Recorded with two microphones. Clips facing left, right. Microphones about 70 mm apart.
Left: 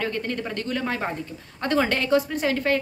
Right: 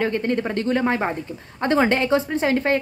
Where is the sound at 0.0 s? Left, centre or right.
Right.